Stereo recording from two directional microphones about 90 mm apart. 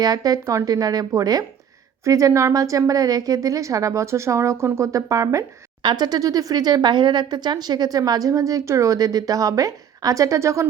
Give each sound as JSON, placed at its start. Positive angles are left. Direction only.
{"t": 0.0, "sound": "a woman's voice", "side_deg": -45}
{"t": 5.8, "sound": "speech", "side_deg": -55}